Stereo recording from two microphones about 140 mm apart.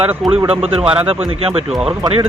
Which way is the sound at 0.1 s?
10° right (ahead or behind).